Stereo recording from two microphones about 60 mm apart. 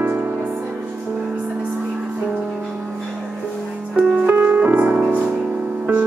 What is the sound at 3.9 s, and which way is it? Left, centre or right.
Music, right.